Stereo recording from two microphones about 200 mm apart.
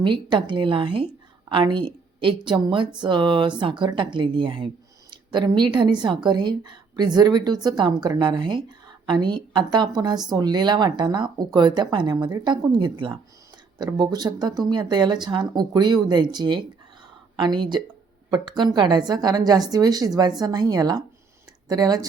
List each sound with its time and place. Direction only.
0.0 s a woman's voice: 25° right (ahead or behind)
5.1 s a sound: 20° right (ahead or behind)
5.7 s speech: 25° right (ahead or behind)